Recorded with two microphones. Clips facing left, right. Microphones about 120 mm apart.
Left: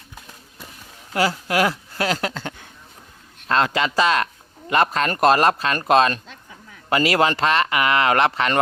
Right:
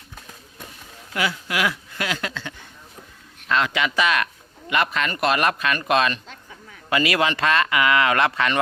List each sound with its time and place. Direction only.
1.1 s speech: 40° left (ahead or behind)